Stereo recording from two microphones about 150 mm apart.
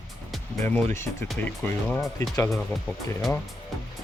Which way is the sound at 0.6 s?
15° left (ahead or behind).